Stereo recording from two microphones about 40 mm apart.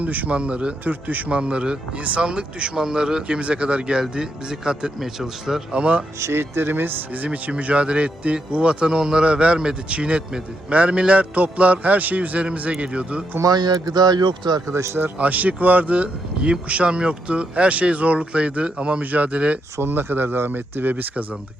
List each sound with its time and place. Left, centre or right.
0.0 s a man's voice: right
0.3 s a man's voice: right; by 5.6 s centre
5.7 s speech: right
6.3 s speech: right
7.5 s a man's voice: right
14.7 s speech: right
15.2 s speech: right
19.8 s speech: right